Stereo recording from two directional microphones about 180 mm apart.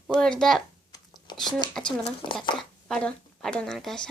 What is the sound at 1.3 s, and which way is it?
Speech, 25° left (ahead or behind).